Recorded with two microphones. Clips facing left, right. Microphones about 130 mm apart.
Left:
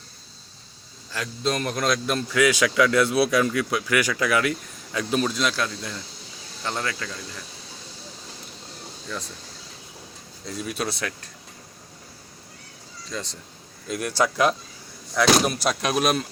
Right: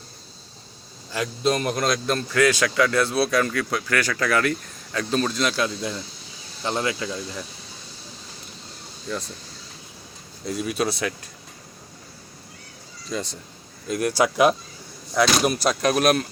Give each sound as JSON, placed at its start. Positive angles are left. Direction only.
{"t": 1.1, "sound": "a man's voice", "side_deg": -10}
{"t": 2.9, "sound": "speech", "side_deg": -30}
{"t": 3.2, "sound": "a man's voice", "side_deg": 15}
{"t": 6.7, "sound": "speech", "side_deg": -20}
{"t": 10.4, "sound": "speech", "side_deg": -5}
{"t": 13.1, "sound": "speech", "side_deg": -10}
{"t": 14.2, "sound": "speech", "side_deg": -10}